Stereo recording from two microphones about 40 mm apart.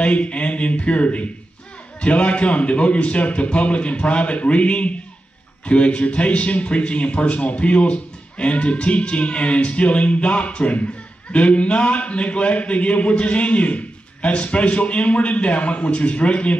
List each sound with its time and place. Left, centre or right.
0.0 s a man's voice: left